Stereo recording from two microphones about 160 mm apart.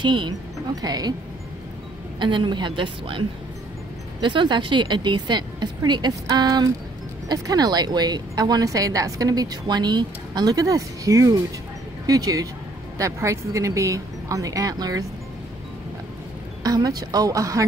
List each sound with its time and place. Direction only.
0.0 s a woman's voice: 30° right (ahead or behind)
2.1 s a woman's voice: 30° right (ahead or behind)
16.6 s a woman's voice: 25° right (ahead or behind)